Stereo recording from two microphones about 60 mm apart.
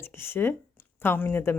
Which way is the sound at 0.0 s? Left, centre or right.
Left.